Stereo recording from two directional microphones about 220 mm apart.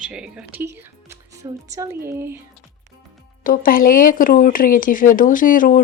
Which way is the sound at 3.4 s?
40° left (ahead or behind).